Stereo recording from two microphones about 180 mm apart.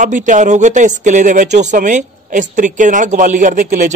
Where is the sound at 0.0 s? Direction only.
45° right (ahead or behind).